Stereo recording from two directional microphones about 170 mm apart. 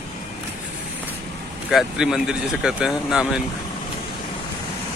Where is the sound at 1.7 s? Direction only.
Centre (ahead or behind).